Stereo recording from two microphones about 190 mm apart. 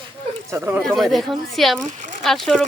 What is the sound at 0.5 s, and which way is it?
Speech, 10° right (ahead or behind).